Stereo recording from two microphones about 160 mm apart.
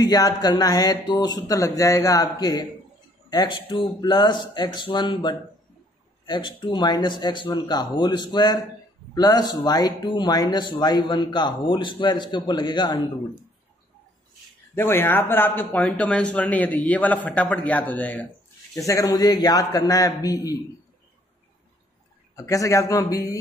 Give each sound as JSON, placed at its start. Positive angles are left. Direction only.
{"t": 0.0, "sound": "speech", "side_deg": 25}
{"t": 14.8, "sound": "speech", "side_deg": 15}
{"t": 22.3, "sound": "speech", "side_deg": 20}